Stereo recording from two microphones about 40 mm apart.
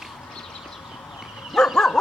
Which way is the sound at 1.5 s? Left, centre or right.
Centre.